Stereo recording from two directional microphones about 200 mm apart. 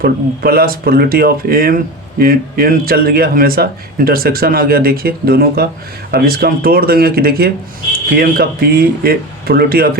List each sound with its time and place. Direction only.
0.0 s speech: 50° right (ahead or behind)